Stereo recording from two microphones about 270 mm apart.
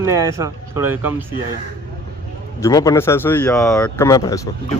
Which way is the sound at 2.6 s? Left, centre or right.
Centre.